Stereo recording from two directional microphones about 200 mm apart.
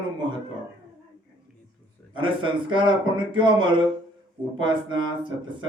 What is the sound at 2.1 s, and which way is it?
Speech, 25° right (ahead or behind).